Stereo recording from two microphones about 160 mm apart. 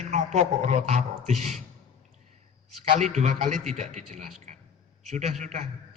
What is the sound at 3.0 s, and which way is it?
A man's voice, 45° right (ahead or behind).